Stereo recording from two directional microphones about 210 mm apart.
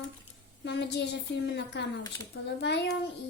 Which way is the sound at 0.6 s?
55° left (ahead or behind).